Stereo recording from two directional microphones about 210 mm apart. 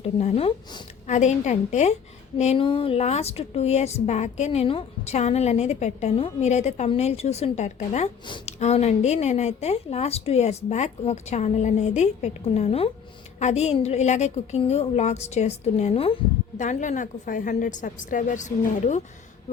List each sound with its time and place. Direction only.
0.2 s a woman's voice: 30° left (ahead or behind)